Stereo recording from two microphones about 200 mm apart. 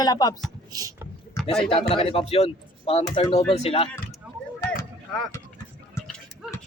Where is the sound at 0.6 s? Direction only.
20° right (ahead or behind).